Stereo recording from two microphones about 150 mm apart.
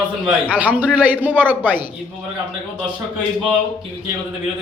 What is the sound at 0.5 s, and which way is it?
Speech, 10° right (ahead or behind).